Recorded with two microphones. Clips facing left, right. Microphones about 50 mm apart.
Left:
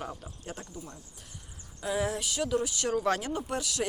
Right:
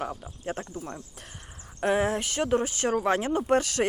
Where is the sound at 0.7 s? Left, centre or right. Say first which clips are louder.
Right 7 dB; right.